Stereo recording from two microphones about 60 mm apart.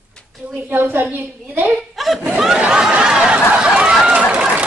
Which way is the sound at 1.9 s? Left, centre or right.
Centre.